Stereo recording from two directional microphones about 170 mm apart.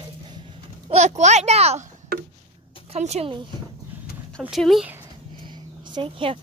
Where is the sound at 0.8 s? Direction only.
40° right (ahead or behind).